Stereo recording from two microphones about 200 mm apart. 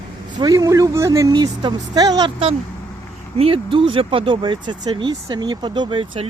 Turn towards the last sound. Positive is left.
turn(degrees=-25)  # may be behind; listen again after turning